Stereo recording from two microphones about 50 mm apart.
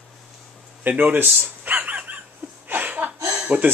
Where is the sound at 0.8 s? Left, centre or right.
Right.